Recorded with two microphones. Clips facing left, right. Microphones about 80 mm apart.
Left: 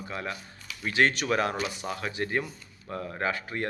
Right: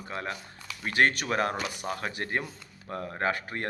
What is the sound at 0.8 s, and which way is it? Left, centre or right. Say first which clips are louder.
Speech: even; right.